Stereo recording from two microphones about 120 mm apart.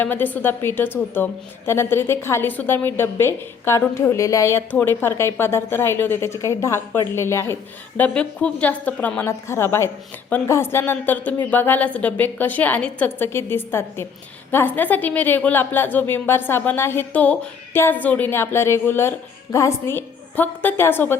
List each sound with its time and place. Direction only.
0.0 s a woman's voice: 15° left (ahead or behind)
7.9 s a woman's voice: 10° left (ahead or behind)